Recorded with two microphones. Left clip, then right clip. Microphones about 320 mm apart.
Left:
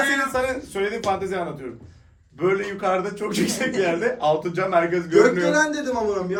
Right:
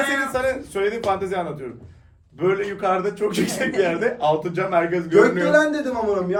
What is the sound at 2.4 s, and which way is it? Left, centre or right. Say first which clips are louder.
A man's voice: right 1 dB; centre.